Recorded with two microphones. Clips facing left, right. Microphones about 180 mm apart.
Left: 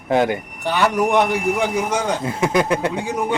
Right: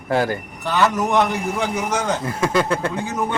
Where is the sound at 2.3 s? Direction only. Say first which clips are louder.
Left 2 dB; 20° left (ahead or behind).